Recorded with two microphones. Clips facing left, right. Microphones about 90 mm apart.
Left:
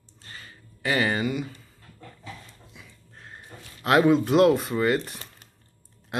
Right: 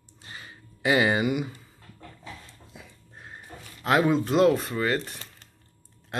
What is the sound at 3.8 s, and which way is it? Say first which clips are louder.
Speech: left 3 dB; centre (ahead or behind).